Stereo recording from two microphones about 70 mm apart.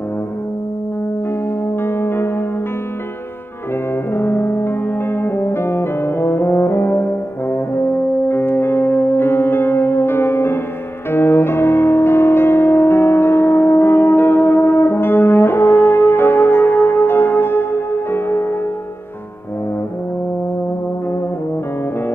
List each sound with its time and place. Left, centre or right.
1.8 s music: left
4.1 s music: left